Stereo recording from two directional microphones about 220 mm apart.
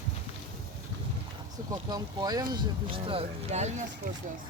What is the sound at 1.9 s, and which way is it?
Speech, 15° right (ahead or behind).